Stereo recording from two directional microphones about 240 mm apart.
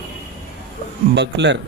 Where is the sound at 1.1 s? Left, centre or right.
Right.